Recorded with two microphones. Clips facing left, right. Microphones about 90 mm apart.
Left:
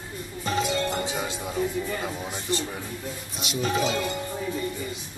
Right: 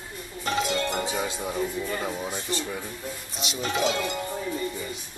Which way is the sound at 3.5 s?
Centre (ahead or behind).